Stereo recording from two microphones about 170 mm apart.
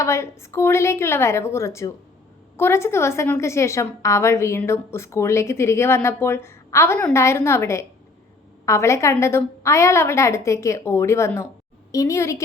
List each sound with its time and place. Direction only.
0.0 s a woman's voice: 15° left (ahead or behind)